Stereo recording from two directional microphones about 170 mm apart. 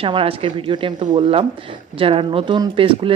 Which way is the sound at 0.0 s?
35° right (ahead or behind).